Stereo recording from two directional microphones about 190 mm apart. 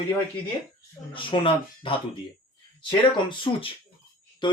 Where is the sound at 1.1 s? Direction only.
25° left (ahead or behind).